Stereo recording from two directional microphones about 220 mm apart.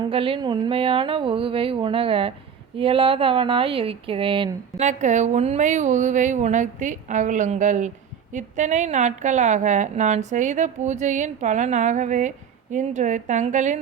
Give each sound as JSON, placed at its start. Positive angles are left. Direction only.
{"t": 0.0, "sound": "speech", "side_deg": -25}
{"t": 4.8, "sound": "a woman's voice", "side_deg": -35}